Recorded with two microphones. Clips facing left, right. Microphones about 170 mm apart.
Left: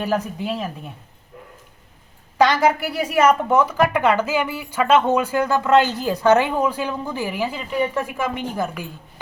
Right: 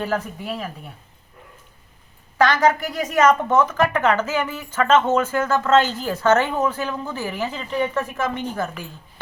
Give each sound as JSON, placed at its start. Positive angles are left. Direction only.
{"t": 0.0, "sound": "speech", "side_deg": 20}
{"t": 2.4, "sound": "speech", "side_deg": 10}